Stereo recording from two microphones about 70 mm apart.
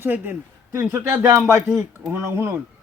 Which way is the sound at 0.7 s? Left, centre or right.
Right.